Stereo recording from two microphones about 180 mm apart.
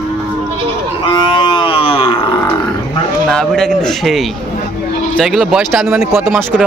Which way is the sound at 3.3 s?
5° left (ahead or behind).